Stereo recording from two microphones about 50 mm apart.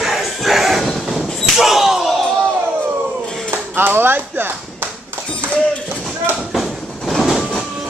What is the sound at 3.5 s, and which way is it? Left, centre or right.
Clapping, right.